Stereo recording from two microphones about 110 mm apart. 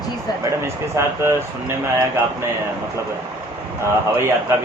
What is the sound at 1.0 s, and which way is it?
Speech, 25° right (ahead or behind).